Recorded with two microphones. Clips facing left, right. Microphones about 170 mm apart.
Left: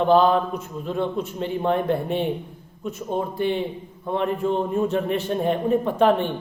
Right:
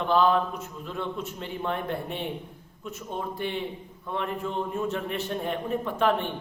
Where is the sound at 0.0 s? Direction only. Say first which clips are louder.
Left 5 dB; 25° left (ahead or behind).